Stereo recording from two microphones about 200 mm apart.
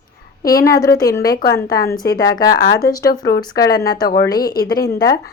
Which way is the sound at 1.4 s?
50° left (ahead or behind).